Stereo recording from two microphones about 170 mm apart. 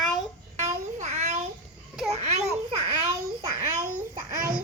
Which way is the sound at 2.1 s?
40° right (ahead or behind).